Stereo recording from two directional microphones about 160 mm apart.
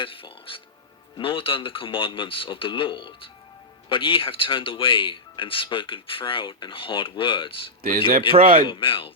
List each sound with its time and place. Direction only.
0.0 s speech: 35° left (ahead or behind)
7.8 s speech: 65° right (ahead or behind)
8.6 s speech: 30° left (ahead or behind)